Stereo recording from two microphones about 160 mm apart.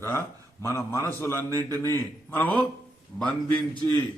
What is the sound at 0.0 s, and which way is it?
A man's voice, 15° left (ahead or behind).